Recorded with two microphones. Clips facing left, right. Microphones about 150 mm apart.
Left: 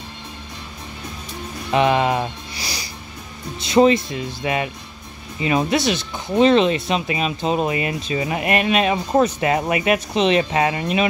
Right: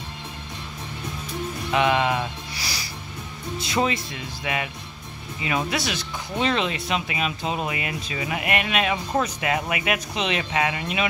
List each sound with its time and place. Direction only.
1.7 s speech: 35° left (ahead or behind)
2.6 s music: 20° left (ahead or behind)
3.5 s speech: 25° left (ahead or behind)